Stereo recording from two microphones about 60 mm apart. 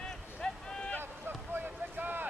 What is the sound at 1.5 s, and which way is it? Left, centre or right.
Boat, right.